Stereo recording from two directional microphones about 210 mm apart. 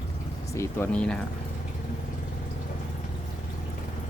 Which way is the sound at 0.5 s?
10° left (ahead or behind).